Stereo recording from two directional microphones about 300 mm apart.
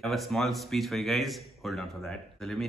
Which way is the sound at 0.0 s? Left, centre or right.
Centre.